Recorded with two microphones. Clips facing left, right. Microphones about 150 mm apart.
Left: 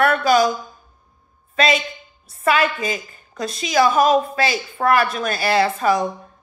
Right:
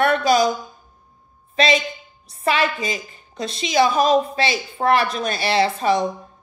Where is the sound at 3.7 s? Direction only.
45° left (ahead or behind).